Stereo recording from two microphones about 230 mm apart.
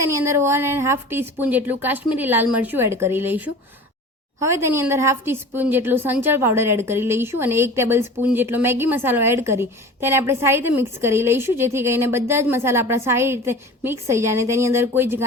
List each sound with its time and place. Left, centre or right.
0.0 s a woman's voice: centre